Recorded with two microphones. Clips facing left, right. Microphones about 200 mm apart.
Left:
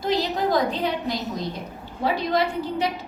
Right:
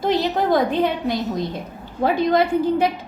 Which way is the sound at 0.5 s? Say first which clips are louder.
Right 4 dB; 55° right (ahead or behind).